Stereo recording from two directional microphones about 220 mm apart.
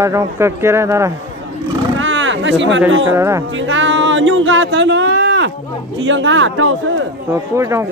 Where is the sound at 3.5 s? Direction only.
60° right (ahead or behind).